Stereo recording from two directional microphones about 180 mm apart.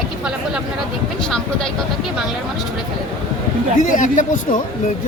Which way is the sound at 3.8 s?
45° left (ahead or behind).